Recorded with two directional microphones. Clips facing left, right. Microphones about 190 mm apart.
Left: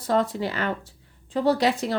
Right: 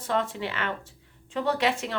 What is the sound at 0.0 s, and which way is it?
Speech, 40° left (ahead or behind).